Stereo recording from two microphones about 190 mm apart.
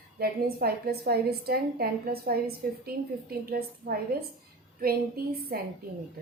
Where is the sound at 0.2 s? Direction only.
55° right (ahead or behind).